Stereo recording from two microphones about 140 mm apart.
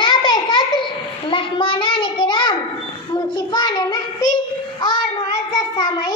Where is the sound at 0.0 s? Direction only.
35° left (ahead or behind).